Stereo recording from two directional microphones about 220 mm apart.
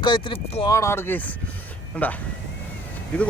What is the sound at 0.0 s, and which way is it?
Speech, 20° left (ahead or behind).